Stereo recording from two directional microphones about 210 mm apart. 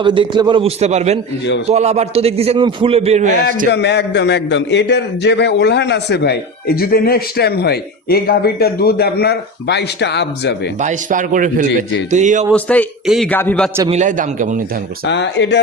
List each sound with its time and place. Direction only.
0.0 s a man's voice: 20° right (ahead or behind)
3.7 s a man's voice: 55° left (ahead or behind)
10.8 s a man's voice: 35° right (ahead or behind)
12.5 s a man's voice: 5° left (ahead or behind)
13.8 s a man's voice: 35° right (ahead or behind)
15.0 s speech: 55° left (ahead or behind)